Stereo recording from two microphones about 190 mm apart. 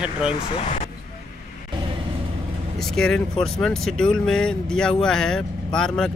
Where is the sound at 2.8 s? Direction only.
Centre (ahead or behind).